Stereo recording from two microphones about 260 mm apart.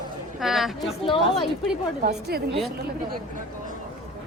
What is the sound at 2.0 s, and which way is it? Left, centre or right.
Speech, right.